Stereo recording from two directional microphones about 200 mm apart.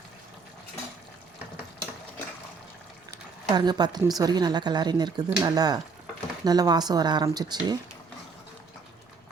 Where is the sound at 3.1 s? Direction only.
20° right (ahead or behind).